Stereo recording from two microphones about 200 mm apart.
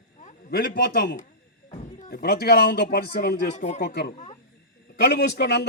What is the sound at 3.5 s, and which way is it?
Speech, 35° left (ahead or behind).